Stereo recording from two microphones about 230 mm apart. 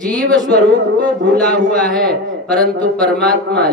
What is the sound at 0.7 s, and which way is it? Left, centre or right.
Music, right.